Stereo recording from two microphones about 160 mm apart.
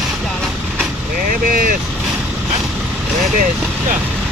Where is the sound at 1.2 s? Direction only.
60° right (ahead or behind).